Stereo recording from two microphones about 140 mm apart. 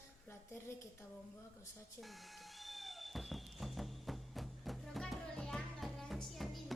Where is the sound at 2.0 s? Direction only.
Centre (ahead or behind).